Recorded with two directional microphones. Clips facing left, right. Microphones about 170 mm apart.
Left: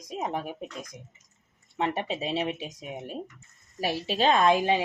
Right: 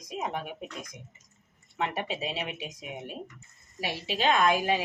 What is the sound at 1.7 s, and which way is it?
A woman's voice, 30° left (ahead or behind).